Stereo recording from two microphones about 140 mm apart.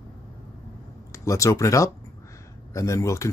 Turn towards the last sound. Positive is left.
turn(degrees=20)  # may be behind; listen again after turning